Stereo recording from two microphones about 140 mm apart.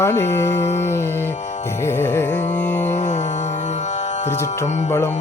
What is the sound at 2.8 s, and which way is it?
Mantra, 55° left (ahead or behind).